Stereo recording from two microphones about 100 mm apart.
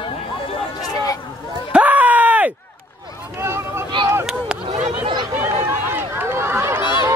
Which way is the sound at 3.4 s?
25° right (ahead or behind).